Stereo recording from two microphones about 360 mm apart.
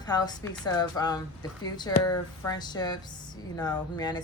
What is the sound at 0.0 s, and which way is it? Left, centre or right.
A woman's voice, centre.